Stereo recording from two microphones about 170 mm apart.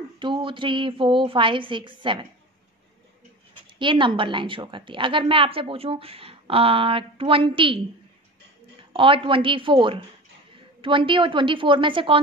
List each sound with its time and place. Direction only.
0.2 s a woman's voice: 30° right (ahead or behind)
3.7 s a woman's voice: 30° right (ahead or behind)
8.9 s a woman's voice: 30° right (ahead or behind)